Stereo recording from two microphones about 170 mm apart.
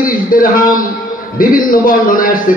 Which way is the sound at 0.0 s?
55° left (ahead or behind).